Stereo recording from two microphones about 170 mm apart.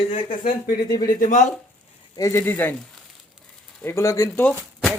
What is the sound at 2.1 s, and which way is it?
Speech, 15° left (ahead or behind).